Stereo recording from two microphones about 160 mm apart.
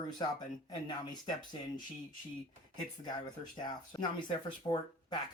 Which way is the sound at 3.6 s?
25° left (ahead or behind).